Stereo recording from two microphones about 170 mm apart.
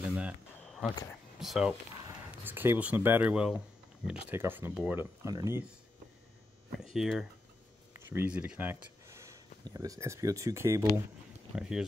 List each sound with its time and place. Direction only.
0.0 s a sound: 10° right (ahead or behind)
1.4 s speech: centre (ahead or behind)
2.4 s speech: 10° right (ahead or behind)
6.7 s speech: centre (ahead or behind)